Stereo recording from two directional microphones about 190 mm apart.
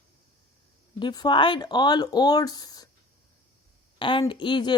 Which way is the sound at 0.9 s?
25° left (ahead or behind).